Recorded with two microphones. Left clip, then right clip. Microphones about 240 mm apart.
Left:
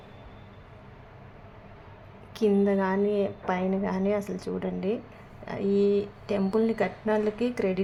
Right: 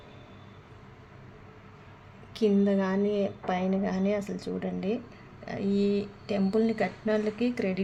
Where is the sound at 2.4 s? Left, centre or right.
Centre.